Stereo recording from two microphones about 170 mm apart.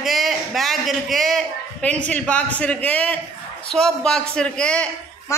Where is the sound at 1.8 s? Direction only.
5° left (ahead or behind).